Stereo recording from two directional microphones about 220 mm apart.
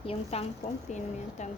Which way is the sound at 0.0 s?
25° left (ahead or behind).